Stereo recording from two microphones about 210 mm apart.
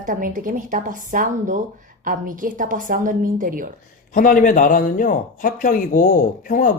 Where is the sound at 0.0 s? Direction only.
40° right (ahead or behind).